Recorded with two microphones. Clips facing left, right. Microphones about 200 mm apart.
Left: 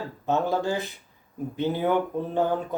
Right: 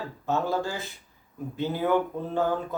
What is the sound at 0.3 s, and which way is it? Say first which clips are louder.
Speech: left 3 dB; 20° left (ahead or behind).